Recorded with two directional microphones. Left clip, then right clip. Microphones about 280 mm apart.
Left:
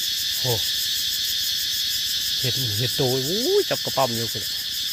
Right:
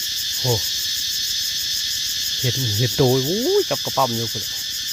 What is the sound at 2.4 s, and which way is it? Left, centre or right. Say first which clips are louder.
Speech: right 2 dB; right.